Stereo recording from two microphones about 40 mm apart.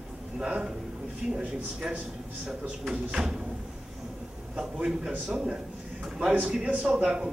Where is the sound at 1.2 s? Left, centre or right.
Centre.